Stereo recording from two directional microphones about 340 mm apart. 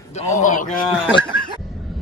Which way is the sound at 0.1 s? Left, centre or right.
Left.